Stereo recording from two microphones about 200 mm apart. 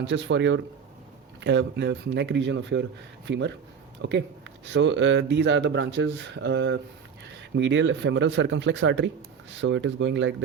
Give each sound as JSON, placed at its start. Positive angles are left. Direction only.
{"t": 0.0, "sound": "speech", "side_deg": -65}
{"t": 4.0, "sound": "speech", "side_deg": -80}
{"t": 4.6, "sound": "speech", "side_deg": -65}